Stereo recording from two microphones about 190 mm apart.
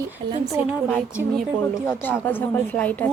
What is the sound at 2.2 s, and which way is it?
Speech, 10° left (ahead or behind).